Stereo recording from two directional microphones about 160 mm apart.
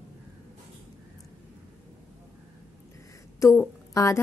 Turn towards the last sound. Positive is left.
turn(degrees=15)  # may be behind; listen again after turning